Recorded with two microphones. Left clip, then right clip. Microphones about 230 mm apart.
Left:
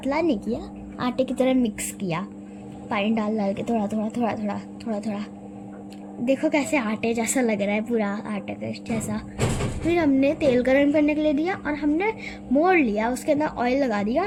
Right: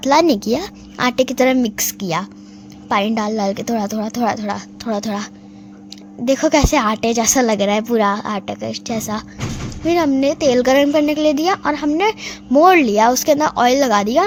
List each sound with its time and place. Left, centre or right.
0.0 s a woman's voice: right